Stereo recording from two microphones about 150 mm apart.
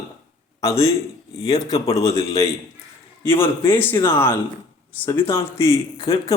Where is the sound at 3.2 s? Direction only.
15° left (ahead or behind).